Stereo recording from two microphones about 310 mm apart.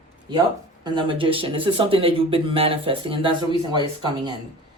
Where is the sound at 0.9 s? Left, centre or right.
Centre.